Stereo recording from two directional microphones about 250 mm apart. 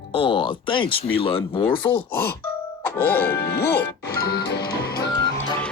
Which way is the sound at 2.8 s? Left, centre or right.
Centre.